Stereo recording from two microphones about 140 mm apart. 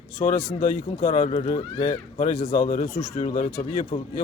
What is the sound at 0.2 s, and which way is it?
Speech, 70° left (ahead or behind).